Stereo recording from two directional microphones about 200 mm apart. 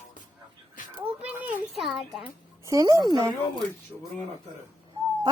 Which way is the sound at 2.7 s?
15° right (ahead or behind).